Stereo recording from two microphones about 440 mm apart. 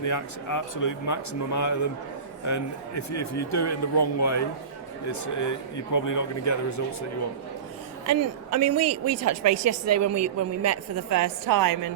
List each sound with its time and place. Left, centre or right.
0.0 s a man's voice: left
8.0 s a woman's voice: right